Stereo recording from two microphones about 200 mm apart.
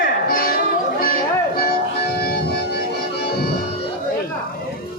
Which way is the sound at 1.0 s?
45° left (ahead or behind).